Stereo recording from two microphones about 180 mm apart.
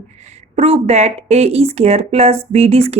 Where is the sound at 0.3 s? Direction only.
35° right (ahead or behind).